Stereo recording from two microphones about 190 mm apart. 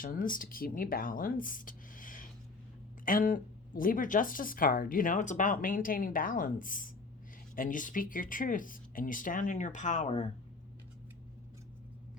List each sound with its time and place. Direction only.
0.0 s speech: 50° left (ahead or behind)